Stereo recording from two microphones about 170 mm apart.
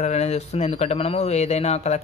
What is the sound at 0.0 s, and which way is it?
Speech, 40° left (ahead or behind).